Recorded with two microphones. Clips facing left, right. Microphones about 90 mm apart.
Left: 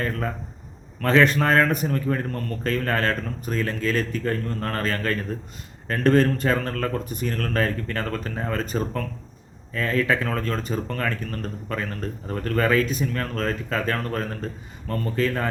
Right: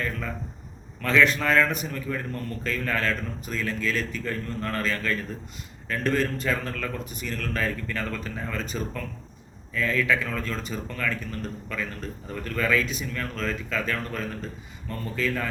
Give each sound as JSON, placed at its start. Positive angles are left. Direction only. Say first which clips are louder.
{"t": 1.2, "sound": "a man's voice", "louder": "left 1 dB", "side_deg": 40}
{"t": 6.1, "sound": "a man's voice", "louder": "left 6 dB", "side_deg": 40}